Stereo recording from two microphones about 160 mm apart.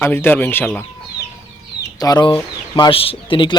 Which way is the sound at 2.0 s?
25° left (ahead or behind).